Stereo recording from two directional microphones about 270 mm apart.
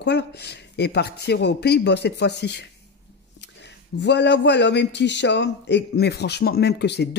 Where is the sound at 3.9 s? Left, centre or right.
Left.